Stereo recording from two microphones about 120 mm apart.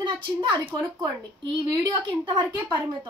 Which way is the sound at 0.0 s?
40° right (ahead or behind).